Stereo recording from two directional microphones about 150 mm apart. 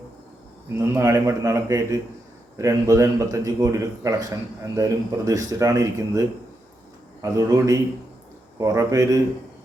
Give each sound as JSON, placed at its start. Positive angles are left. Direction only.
{"t": 0.7, "sound": "a man's voice", "side_deg": -15}